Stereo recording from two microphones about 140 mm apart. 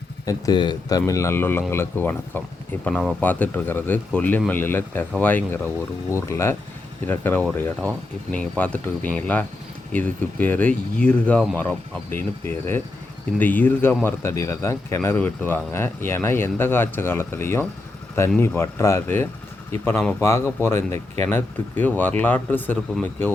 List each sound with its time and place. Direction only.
0.3 s a man's voice: 30° left (ahead or behind)
2.8 s a man's voice: centre (ahead or behind)